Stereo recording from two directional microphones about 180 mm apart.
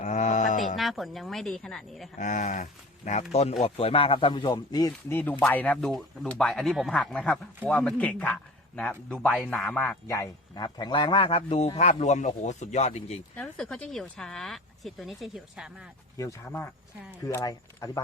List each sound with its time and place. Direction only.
0.0 s a sound: 40° left (ahead or behind)
0.8 s speech: centre (ahead or behind)
2.1 s a man's voice: 45° left (ahead or behind)
13.3 s speech: 5° left (ahead or behind)
16.1 s a man's voice: 15° left (ahead or behind)